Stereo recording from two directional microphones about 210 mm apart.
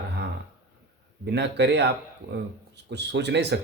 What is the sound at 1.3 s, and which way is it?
Speech, 55° right (ahead or behind).